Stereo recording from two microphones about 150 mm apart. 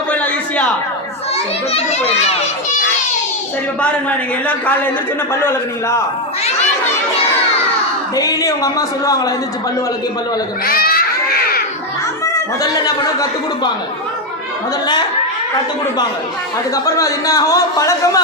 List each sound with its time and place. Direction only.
0.1 s a sound: 10° left (ahead or behind)
5.3 s a man's voice: 15° left (ahead or behind)
8.1 s speech: 25° left (ahead or behind)
10.7 s baby cry: 80° left
12.8 s speech: 25° left (ahead or behind)
16.7 s speech: 25° left (ahead or behind)